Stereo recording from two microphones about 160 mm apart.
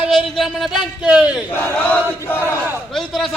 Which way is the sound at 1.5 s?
10° left (ahead or behind).